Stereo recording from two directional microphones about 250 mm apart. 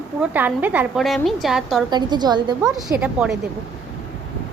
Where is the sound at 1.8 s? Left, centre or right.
Centre.